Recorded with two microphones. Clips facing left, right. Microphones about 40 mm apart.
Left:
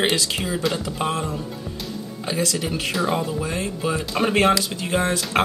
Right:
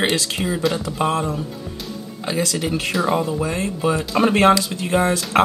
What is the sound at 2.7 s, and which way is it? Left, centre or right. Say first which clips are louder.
Speech: right 3 dB; centre.